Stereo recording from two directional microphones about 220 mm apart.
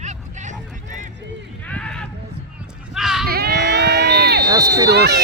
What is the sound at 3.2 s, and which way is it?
Crowd, 45° right (ahead or behind).